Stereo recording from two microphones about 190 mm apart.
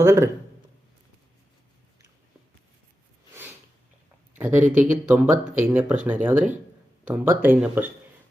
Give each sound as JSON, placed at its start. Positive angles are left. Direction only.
{"t": 0.0, "sound": "a sound", "side_deg": -15}
{"t": 4.4, "sound": "speech", "side_deg": -40}
{"t": 4.7, "sound": "speech", "side_deg": -10}